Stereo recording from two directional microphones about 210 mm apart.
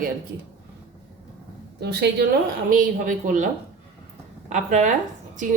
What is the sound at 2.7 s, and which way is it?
Speech, 40° right (ahead or behind).